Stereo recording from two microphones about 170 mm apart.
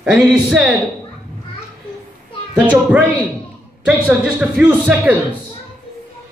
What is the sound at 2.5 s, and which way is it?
A man's voice, 5° right (ahead or behind).